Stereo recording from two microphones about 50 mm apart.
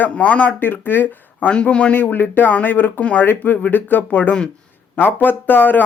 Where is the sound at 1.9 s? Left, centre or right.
Left.